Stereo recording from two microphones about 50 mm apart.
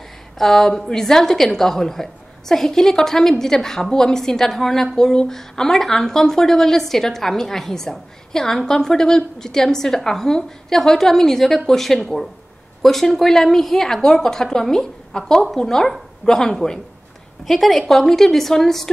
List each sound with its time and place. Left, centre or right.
0.4 s a woman's voice: centre